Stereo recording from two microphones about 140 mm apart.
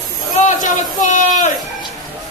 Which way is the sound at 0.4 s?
65° left (ahead or behind).